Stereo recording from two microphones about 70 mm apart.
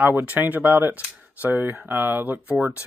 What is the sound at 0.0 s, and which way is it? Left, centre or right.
Speech, right.